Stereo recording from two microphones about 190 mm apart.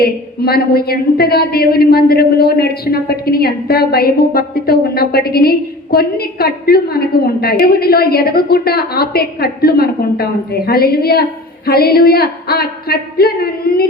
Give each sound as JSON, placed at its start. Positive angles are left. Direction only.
{"t": 0.0, "sound": "speech", "side_deg": 55}